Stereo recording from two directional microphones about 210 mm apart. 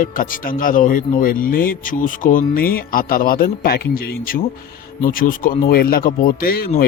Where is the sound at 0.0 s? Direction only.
40° left (ahead or behind).